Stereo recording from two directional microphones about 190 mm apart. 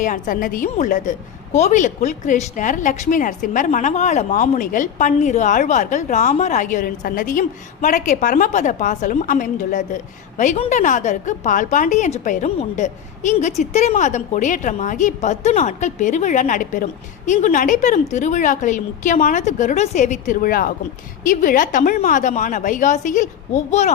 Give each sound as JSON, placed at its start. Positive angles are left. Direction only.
{"t": 0.0, "sound": "a woman's voice", "side_deg": 45}